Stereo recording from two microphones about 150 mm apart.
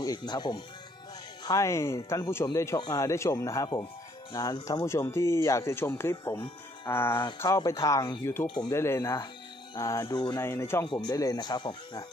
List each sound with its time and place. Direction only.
0.0 s speech: 25° left (ahead or behind)